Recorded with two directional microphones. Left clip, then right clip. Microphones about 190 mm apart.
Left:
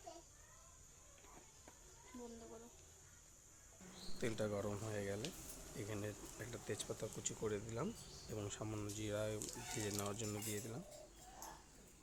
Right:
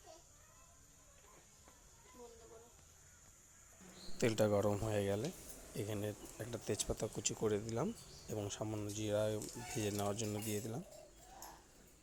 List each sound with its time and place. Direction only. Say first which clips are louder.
4.2 s speech: right 9 dB; 35° right (ahead or behind)